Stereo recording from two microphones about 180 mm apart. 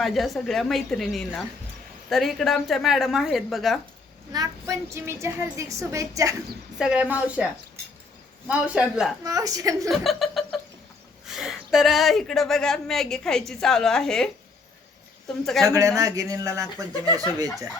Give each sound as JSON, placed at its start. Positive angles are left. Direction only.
{"t": 0.0, "sound": "a woman's voice", "side_deg": 0}
{"t": 4.3, "sound": "a woman's voice", "side_deg": -20}
{"t": 6.7, "sound": "a woman's voice", "side_deg": -5}
{"t": 8.4, "sound": "a woman's voice", "side_deg": -5}
{"t": 9.2, "sound": "a woman's voice", "side_deg": -20}
{"t": 9.9, "sound": "a woman's voice", "side_deg": 0}
{"t": 15.3, "sound": "a woman's voice", "side_deg": 5}
{"t": 15.6, "sound": "a woman's voice", "side_deg": -20}